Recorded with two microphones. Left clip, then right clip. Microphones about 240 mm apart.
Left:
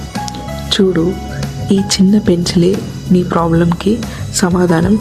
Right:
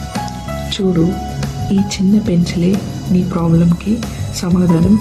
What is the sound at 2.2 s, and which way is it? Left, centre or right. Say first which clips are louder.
Speech: left 5 dB; left.